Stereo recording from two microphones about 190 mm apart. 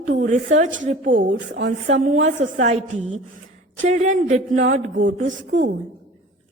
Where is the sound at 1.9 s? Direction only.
40° right (ahead or behind).